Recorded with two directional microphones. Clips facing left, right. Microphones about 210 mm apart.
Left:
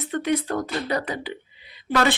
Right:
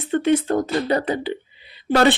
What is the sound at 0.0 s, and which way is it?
Speech, 30° right (ahead or behind).